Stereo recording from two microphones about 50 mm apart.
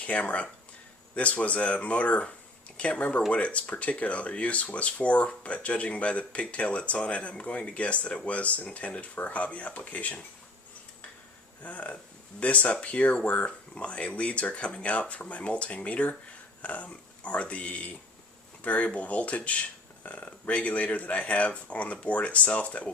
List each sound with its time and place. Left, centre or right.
0.0 s speech: left
11.6 s speech: left